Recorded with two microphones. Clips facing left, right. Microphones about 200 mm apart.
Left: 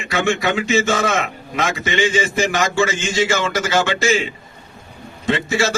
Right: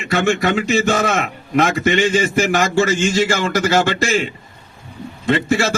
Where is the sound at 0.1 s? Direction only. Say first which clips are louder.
Right 2 dB; 55° right (ahead or behind).